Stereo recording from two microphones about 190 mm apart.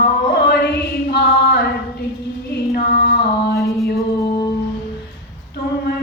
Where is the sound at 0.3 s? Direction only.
60° left (ahead or behind).